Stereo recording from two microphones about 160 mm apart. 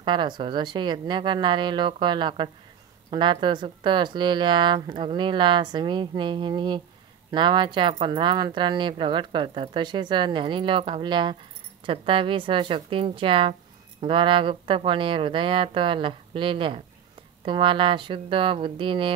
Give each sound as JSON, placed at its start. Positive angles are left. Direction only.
{"t": 0.0, "sound": "speech", "side_deg": -30}